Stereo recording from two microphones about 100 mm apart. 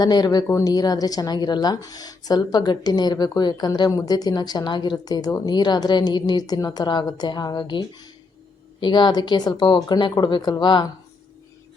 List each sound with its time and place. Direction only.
0.0 s speech: 40° left (ahead or behind)